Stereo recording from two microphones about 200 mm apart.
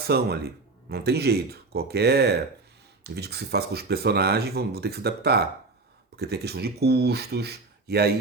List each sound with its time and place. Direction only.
0.1 s speech: 50° right (ahead or behind)